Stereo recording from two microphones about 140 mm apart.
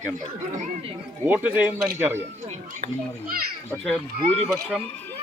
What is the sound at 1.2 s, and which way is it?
Speech, 10° right (ahead or behind).